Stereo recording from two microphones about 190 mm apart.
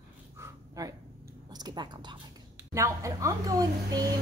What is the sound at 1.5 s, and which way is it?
A woman's voice, 20° right (ahead or behind).